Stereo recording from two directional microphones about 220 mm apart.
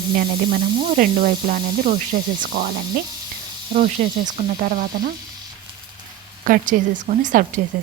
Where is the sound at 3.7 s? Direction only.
30° right (ahead or behind).